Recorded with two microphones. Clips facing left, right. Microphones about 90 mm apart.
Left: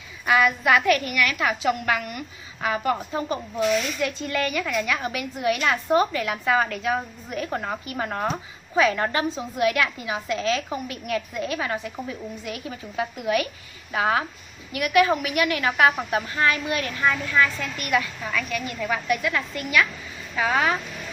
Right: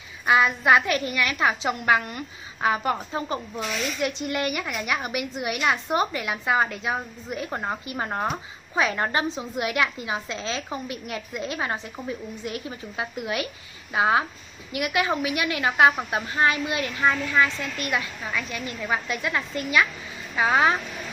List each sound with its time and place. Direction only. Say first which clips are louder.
0.3 s a woman's voice: right 1 dB; 25° right (ahead or behind)